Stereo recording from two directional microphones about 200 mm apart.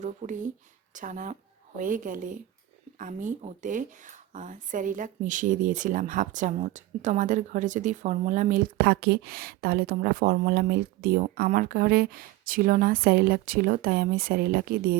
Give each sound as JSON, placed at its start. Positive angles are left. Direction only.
{"t": 0.0, "sound": "a woman's voice", "side_deg": -40}